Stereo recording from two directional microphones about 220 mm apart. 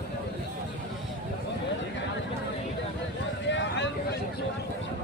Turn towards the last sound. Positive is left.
turn(degrees=55)  # may be behind; listen again after turning